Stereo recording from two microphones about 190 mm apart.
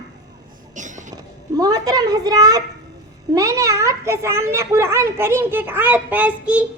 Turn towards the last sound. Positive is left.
turn(degrees=-5)  # may be behind; listen again after turning